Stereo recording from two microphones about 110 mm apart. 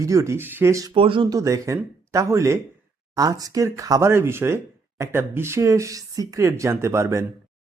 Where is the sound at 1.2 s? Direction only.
30° right (ahead or behind).